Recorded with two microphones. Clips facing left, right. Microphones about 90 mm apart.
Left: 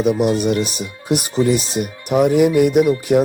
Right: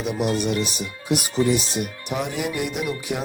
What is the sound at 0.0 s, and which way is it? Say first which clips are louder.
Speech: left 7 dB; 50° left (ahead or behind).